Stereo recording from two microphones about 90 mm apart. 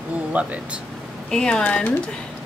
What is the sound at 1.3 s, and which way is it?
Speech, 10° left (ahead or behind).